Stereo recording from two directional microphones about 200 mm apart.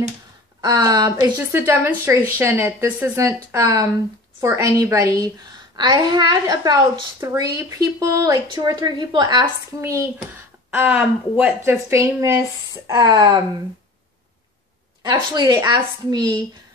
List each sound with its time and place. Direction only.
0.6 s a woman's voice: 20° right (ahead or behind)
15.0 s a woman's voice: 20° right (ahead or behind)